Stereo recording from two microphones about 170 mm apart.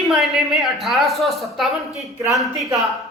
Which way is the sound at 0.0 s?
Centre (ahead or behind).